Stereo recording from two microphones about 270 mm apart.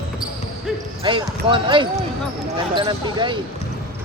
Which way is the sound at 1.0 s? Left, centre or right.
Centre.